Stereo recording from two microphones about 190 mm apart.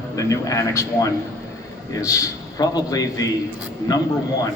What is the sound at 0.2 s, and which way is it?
Speech, 15° left (ahead or behind).